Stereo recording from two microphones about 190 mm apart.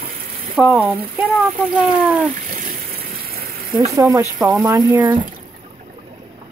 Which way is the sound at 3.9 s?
20° right (ahead or behind).